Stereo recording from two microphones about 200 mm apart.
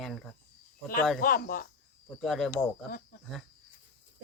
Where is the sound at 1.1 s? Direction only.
45° left (ahead or behind).